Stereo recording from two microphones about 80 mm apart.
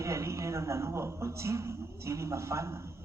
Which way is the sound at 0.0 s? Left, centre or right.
Right.